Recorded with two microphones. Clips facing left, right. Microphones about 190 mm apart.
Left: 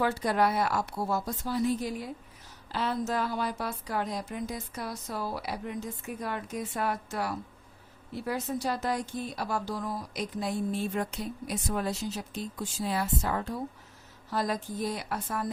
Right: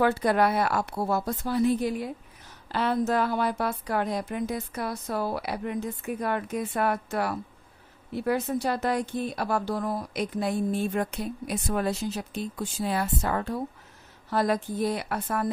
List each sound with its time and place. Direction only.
0.0 s speech: 60° right (ahead or behind)